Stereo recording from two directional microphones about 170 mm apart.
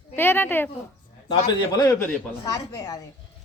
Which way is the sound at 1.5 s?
25° left (ahead or behind).